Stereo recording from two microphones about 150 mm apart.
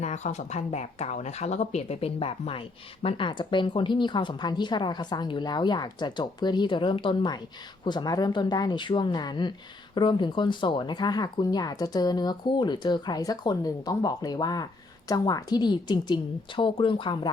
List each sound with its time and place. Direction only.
0.0 s speech: 50° left (ahead or behind); by 17.3 s 35° left (ahead or behind)